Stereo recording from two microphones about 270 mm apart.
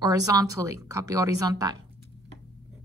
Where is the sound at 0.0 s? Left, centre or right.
Centre.